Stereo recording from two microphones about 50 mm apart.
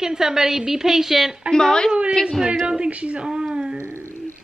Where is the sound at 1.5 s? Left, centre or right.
Centre.